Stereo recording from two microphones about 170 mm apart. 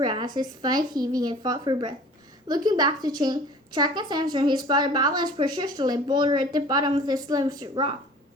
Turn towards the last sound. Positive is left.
turn(degrees=-25)  # may be behind; listen again after turning